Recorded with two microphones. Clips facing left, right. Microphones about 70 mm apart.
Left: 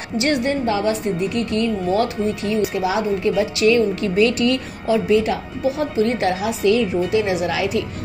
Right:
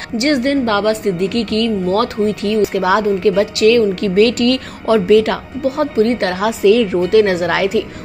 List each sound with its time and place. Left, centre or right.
0.2 s a woman's voice: right
2.5 s a woman's voice: right